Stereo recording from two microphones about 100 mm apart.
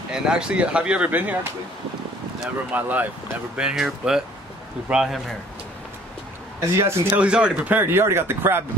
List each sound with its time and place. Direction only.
0.1 s speech: 10° right (ahead or behind)
2.7 s speech: 15° right (ahead or behind)
3.5 s speech: 5° right (ahead or behind)
6.8 s speech: 25° right (ahead or behind)
7.2 s speech: 10° right (ahead or behind)